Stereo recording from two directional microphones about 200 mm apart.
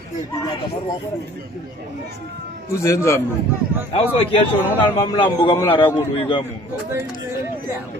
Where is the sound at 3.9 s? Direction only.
25° left (ahead or behind).